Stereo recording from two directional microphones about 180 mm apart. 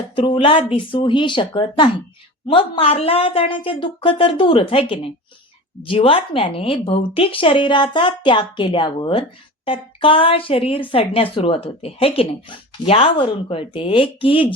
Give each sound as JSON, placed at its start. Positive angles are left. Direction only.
{"t": 0.2, "sound": "a woman's voice", "side_deg": 30}